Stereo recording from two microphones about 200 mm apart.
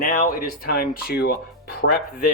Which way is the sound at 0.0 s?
45° left (ahead or behind).